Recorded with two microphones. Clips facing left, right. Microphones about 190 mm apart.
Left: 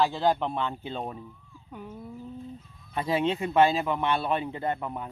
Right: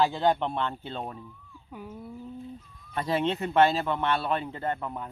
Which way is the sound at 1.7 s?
5° right (ahead or behind).